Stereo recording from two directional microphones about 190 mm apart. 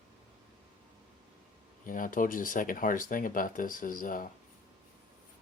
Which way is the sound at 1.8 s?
45° left (ahead or behind).